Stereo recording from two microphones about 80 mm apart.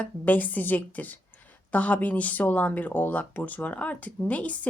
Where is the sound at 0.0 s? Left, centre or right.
Left.